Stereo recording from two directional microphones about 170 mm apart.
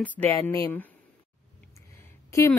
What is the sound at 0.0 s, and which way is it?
Speech, 10° left (ahead or behind).